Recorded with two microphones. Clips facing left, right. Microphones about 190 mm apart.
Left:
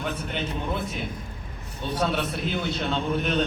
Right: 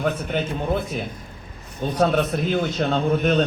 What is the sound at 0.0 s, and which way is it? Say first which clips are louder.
Speech: right 6 dB; 40° right (ahead or behind).